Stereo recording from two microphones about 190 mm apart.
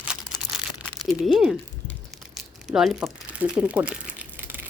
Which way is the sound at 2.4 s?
Centre (ahead or behind).